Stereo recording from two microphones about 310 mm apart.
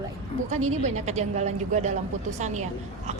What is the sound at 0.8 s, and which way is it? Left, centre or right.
A woman's voice, right.